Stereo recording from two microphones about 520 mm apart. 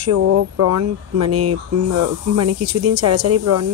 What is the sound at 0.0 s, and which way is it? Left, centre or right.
Speech, right.